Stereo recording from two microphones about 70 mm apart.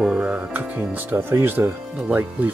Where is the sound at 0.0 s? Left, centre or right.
Centre.